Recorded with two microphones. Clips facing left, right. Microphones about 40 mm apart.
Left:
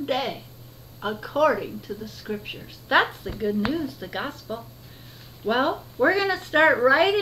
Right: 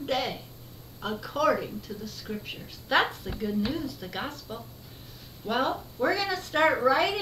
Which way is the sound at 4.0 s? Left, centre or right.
Centre.